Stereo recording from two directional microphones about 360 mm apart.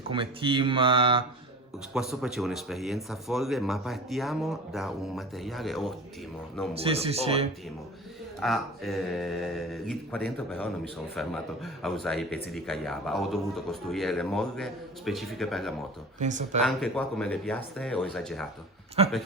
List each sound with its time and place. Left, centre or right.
0.1 s speech: centre
1.9 s speech: centre
6.7 s speech: centre
8.4 s speech: centre
16.2 s speech: centre
16.6 s speech: centre
19.0 s speech: centre